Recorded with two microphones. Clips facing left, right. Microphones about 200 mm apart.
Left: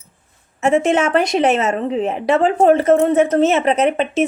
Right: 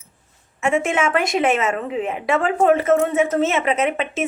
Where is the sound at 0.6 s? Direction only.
35° left (ahead or behind).